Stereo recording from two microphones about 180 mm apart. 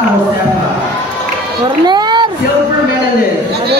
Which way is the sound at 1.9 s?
25° right (ahead or behind).